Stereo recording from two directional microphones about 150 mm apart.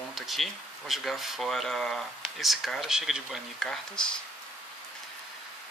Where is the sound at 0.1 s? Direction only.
Centre (ahead or behind).